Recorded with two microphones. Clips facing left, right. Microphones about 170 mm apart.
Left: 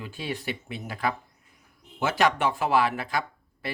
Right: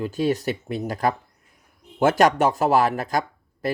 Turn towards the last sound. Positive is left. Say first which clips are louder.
# right 5 dB
turn(degrees=-40)  # may be behind; listen again after turning